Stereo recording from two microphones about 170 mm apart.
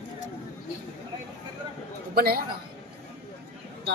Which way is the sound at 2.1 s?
60° right (ahead or behind).